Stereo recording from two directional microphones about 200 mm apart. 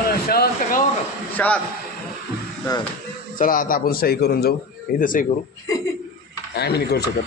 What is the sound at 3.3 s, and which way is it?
A man's voice, 45° left (ahead or behind).